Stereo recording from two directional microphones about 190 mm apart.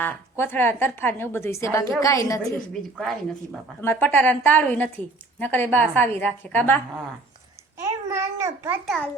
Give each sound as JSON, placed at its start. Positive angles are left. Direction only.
{"t": 0.0, "sound": "a woman's voice", "side_deg": 10}
{"t": 3.0, "sound": "a woman's voice", "side_deg": 0}
{"t": 7.8, "sound": "a child's voice", "side_deg": -15}